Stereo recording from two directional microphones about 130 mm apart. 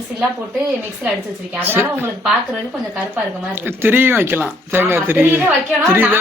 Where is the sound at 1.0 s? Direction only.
20° right (ahead or behind).